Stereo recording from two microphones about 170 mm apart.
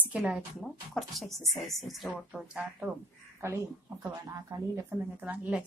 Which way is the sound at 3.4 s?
15° right (ahead or behind).